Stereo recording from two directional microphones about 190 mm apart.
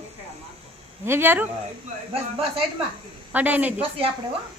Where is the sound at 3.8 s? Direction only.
30° right (ahead or behind).